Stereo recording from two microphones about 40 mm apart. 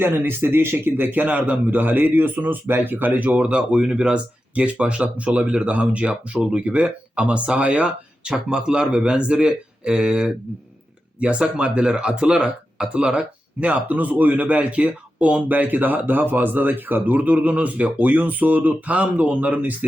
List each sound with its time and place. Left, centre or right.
0.0 s speech: right
1.2 s a man's voice: right
2.6 s a man's voice: right
3.4 s speech: right
6.4 s speech: right
11.2 s speech: right